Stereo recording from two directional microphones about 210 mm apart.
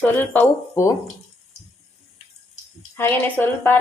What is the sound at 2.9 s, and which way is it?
Speech, 10° left (ahead or behind).